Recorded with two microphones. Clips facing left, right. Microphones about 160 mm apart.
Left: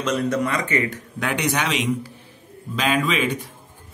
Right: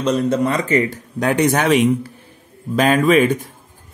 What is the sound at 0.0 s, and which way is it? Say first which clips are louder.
Speech: right 5 dB; 30° right (ahead or behind).